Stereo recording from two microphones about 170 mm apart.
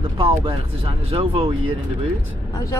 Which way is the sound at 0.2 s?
35° right (ahead or behind).